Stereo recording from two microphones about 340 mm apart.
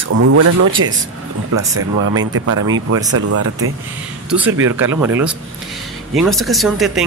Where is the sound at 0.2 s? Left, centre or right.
Right.